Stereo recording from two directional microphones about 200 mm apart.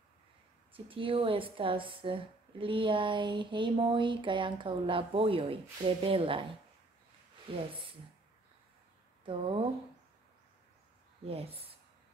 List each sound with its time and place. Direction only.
0.7 s a woman's voice: 25° right (ahead or behind)
7.5 s a woman's voice: 25° right (ahead or behind)
9.2 s speech: 25° right (ahead or behind)
11.2 s speech: 30° right (ahead or behind)